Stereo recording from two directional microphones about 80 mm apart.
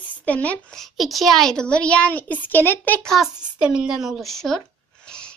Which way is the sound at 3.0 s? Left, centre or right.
Centre.